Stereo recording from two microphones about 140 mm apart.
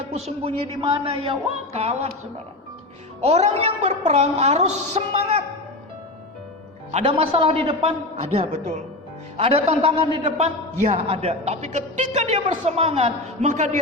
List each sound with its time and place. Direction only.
0.1 s a man's voice: 50° right (ahead or behind)
3.2 s a man's voice: 50° right (ahead or behind)
6.9 s a man's voice: 45° right (ahead or behind)
9.4 s a man's voice: 45° right (ahead or behind)